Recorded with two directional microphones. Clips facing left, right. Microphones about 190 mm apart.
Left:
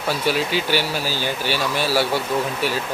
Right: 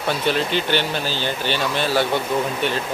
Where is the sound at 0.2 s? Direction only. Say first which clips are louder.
Even; 5° left (ahead or behind).